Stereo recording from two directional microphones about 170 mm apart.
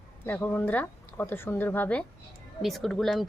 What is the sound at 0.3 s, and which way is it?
Speech, 10° left (ahead or behind).